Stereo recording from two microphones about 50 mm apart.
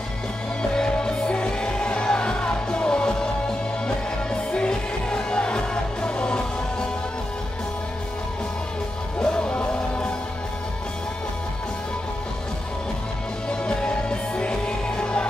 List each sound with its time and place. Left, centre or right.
0.6 s music: centre
9.2 s music: centre
13.5 s music: centre